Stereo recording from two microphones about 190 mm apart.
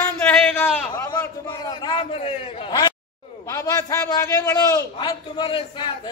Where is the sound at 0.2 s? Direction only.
10° left (ahead or behind); by 2.9 s 25° left (ahead or behind).